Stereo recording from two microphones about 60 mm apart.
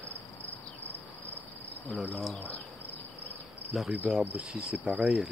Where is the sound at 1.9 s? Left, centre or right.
Centre.